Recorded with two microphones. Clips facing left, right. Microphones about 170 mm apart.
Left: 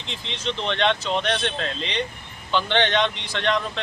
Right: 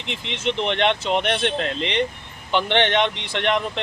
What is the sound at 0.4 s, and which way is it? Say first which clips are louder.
Speech: right 2 dB; 20° right (ahead or behind).